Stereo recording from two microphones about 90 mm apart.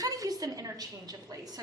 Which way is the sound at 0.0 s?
40° right (ahead or behind).